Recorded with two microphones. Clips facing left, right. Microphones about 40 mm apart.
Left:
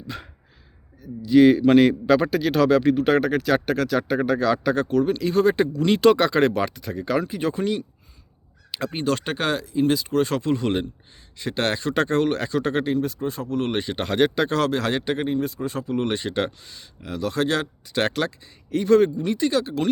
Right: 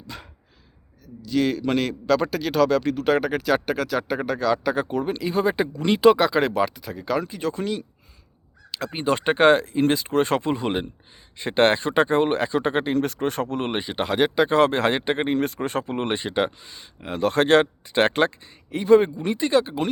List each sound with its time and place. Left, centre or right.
1.0 s a man's voice: centre
8.7 s a sound: centre
9.0 s speech: right
10.5 s speech: centre
11.3 s speech: right
13.0 s speech: right
13.6 s speech: right
13.8 s speech: centre
14.6 s speech: right
15.3 s speech: right
18.7 s speech: centre